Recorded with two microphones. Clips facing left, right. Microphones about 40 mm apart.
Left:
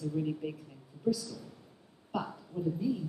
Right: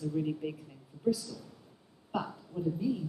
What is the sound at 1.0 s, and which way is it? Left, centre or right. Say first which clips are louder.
Speech: right 1 dB; centre.